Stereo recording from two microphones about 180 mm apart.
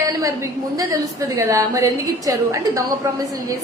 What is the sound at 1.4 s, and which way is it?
A woman's voice, 20° right (ahead or behind).